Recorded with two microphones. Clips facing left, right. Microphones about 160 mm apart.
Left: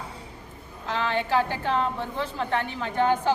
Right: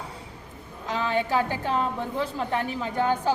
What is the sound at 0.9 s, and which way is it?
A woman's voice, 10° right (ahead or behind).